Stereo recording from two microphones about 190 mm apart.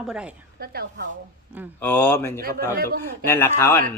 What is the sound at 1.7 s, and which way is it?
A man's voice, 10° left (ahead or behind).